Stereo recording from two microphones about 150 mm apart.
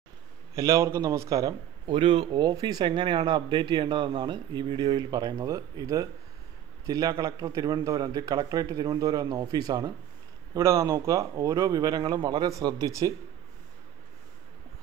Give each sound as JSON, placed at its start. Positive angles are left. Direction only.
{"t": 0.6, "sound": "a man's voice", "side_deg": -20}
{"t": 1.9, "sound": "a man's voice", "side_deg": -35}